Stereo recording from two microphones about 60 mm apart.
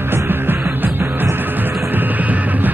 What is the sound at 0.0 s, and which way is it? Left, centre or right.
Music, right.